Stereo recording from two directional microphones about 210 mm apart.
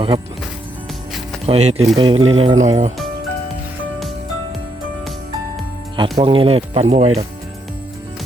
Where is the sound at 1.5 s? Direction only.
30° right (ahead or behind).